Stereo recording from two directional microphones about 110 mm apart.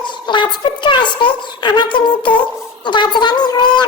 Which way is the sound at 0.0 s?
45° left (ahead or behind).